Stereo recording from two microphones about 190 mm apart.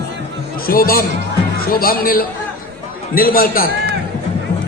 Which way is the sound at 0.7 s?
50° left (ahead or behind).